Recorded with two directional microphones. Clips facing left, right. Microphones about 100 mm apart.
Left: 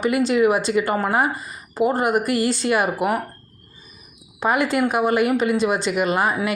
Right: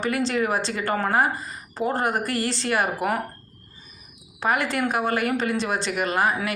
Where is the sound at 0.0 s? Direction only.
15° left (ahead or behind).